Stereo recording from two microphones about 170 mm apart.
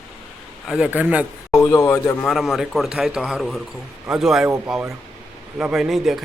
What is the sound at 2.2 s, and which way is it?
Speech, centre (ahead or behind).